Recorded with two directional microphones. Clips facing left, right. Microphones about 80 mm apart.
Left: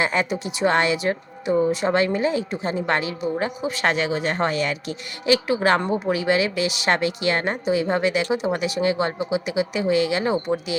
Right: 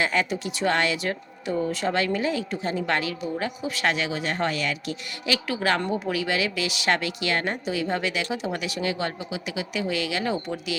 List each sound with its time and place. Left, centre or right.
0.0 s a woman's voice: left